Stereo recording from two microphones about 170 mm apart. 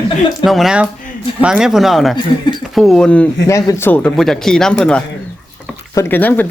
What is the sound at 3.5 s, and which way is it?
Speech, 15° left (ahead or behind).